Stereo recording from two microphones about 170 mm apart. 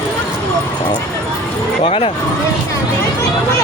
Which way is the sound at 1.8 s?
35° left (ahead or behind).